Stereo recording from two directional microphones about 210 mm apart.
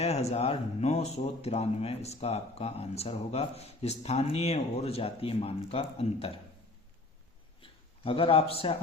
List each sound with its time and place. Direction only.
0.0 s speech: 30° left (ahead or behind)
7.6 s a man's voice: 25° left (ahead or behind)